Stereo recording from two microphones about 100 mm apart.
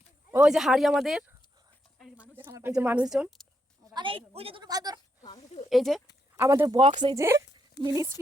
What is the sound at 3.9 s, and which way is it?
Speech, 65° right (ahead or behind).